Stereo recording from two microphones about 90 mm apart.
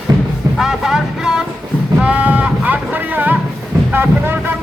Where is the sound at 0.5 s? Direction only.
5° right (ahead or behind); by 4.4 s 20° right (ahead or behind).